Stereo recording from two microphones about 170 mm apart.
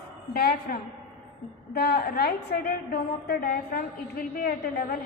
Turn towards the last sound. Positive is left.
turn(degrees=55)  # may be behind; listen again after turning